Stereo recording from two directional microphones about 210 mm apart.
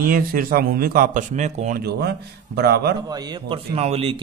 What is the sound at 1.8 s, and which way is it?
A man's voice, 50° right (ahead or behind).